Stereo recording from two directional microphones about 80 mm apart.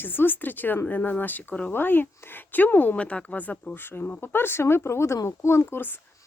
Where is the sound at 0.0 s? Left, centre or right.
Left.